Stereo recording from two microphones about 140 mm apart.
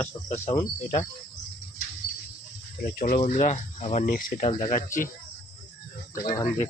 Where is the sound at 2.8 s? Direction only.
90° left.